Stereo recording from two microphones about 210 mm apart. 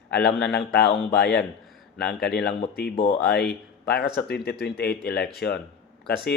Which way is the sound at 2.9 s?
25° left (ahead or behind).